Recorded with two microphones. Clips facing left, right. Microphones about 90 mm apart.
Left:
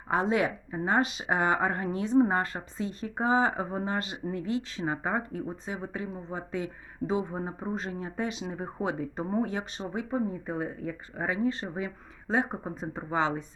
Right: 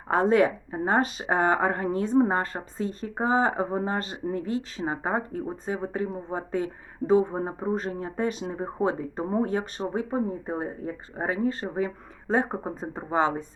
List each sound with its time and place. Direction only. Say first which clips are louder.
0.1 s speech: right 6 dB; 50° right (ahead or behind)